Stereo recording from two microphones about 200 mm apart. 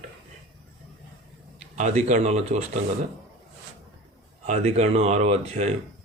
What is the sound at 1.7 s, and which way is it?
Speech, 35° right (ahead or behind).